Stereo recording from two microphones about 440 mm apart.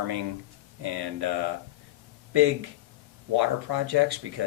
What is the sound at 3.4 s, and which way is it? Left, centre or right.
Speech, right.